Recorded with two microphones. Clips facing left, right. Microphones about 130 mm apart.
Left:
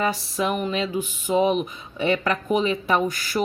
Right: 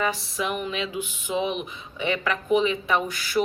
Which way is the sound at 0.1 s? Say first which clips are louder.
Left 4 dB; 40° left (ahead or behind).